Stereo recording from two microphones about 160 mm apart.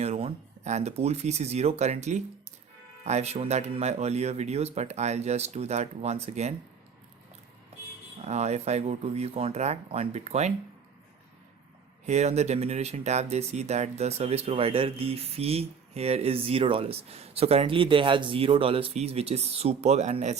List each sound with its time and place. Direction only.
0.0 s speech: 40° right (ahead or behind)
8.2 s speech: 45° right (ahead or behind)
12.0 s speech: 45° right (ahead or behind)